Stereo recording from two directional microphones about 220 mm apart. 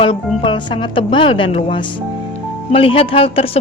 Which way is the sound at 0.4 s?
20° left (ahead or behind).